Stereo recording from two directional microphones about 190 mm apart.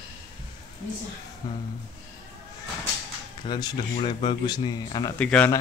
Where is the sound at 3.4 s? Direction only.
25° left (ahead or behind).